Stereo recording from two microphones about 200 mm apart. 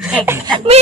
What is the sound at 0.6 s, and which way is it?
Speech, 30° right (ahead or behind).